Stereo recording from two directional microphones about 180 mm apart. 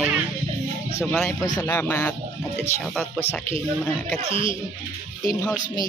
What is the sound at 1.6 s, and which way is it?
Speech, 10° left (ahead or behind).